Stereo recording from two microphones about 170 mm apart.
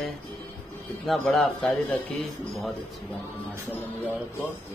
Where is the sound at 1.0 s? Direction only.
5° left (ahead or behind).